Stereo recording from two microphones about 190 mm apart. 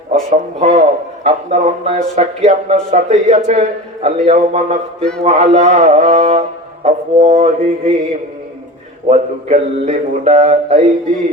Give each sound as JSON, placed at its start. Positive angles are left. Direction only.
{"t": 0.1, "sound": "a man's voice", "side_deg": -35}
{"t": 9.0, "sound": "a man's voice", "side_deg": -35}